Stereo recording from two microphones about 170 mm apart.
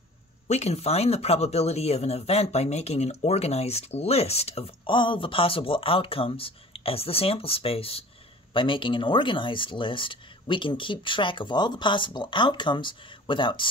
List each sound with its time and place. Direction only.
0.5 s speech: 40° left (ahead or behind)